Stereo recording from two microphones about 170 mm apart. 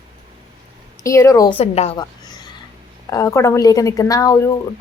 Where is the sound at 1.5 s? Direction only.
40° left (ahead or behind).